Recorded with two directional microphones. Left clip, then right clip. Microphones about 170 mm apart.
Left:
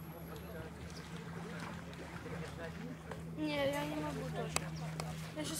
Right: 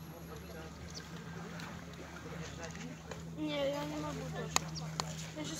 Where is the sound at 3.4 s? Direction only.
20° left (ahead or behind).